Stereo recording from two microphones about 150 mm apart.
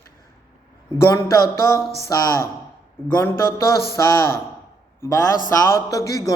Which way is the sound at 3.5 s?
15° left (ahead or behind).